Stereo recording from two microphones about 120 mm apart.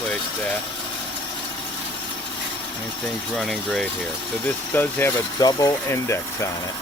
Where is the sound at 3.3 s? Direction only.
5° left (ahead or behind).